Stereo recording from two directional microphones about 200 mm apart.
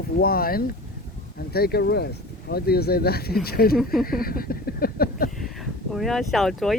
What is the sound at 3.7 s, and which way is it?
Speech, centre (ahead or behind).